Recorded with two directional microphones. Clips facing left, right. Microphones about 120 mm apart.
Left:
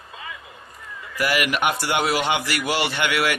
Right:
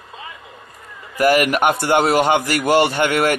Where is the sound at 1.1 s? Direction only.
45° right (ahead or behind).